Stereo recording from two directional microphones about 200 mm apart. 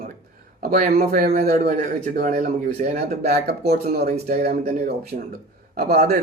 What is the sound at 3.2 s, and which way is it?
Speech, 55° right (ahead or behind).